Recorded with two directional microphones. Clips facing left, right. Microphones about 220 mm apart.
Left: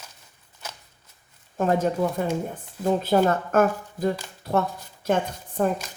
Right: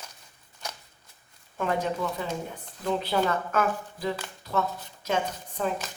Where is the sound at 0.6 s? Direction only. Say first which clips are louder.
Right 1 dB; 5° left (ahead or behind).